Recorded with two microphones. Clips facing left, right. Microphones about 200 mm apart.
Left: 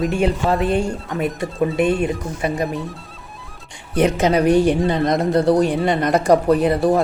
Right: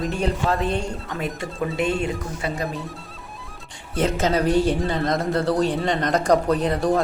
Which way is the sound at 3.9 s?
15° left (ahead or behind).